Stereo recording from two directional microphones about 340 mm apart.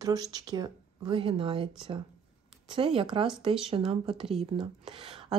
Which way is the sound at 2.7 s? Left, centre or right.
Centre.